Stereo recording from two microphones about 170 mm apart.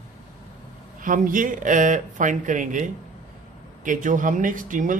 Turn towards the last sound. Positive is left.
turn(degrees=-50)  # may be behind; listen again after turning